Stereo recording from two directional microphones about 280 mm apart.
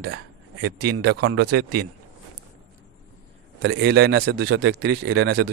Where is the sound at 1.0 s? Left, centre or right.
Right.